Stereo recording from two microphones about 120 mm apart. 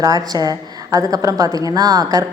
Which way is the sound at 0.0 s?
30° right (ahead or behind).